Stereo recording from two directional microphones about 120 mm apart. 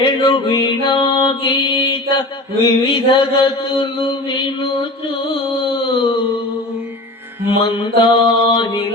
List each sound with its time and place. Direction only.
0.0 s music: 45° left (ahead or behind)
2.6 s mantra: 40° left (ahead or behind)
5.9 s music: 40° left (ahead or behind)
7.6 s mantra: 45° left (ahead or behind)